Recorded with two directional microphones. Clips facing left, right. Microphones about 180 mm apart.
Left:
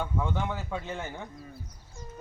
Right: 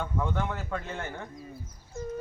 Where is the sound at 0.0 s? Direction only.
Centre (ahead or behind).